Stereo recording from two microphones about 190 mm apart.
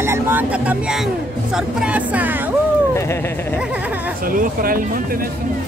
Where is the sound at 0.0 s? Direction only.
10° right (ahead or behind).